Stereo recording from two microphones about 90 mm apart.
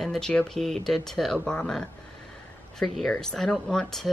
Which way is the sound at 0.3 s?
15° left (ahead or behind).